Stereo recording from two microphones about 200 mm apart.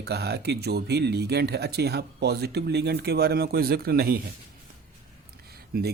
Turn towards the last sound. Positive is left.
turn(degrees=-50)  # may be behind; listen again after turning